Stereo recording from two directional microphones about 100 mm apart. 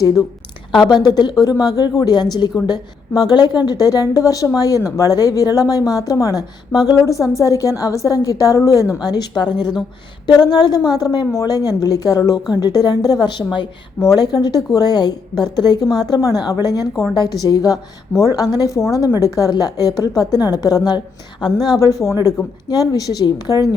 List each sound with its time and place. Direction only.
0.7 s speech: 50° left (ahead or behind)
14.0 s speech: 40° left (ahead or behind)
22.7 s speech: 40° left (ahead or behind)